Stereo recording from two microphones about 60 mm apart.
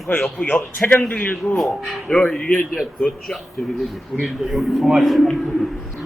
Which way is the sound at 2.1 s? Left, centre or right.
Left.